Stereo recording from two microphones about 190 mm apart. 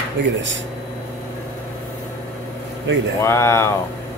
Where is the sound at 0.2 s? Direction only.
65° right (ahead or behind).